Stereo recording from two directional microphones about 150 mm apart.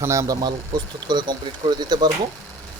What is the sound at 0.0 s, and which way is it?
Speech, 20° right (ahead or behind).